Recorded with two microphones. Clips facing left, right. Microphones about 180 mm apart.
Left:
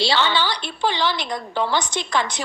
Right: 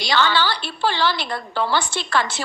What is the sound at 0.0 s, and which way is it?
A woman's voice, 25° left (ahead or behind).